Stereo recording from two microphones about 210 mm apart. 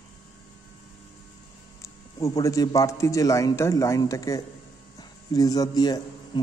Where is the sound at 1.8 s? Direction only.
15° left (ahead or behind).